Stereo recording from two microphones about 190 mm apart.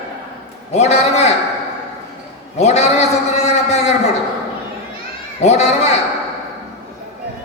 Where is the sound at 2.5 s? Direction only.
35° left (ahead or behind).